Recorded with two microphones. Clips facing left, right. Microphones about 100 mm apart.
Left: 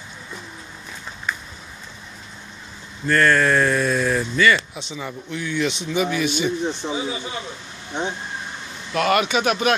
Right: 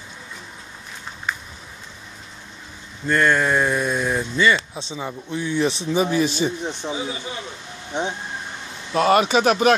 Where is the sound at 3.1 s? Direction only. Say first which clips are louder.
Left 1 dB; 20° right (ahead or behind); by 6.5 s 35° right (ahead or behind).